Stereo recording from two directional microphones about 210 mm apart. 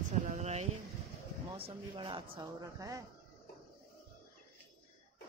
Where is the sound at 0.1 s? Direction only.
35° right (ahead or behind).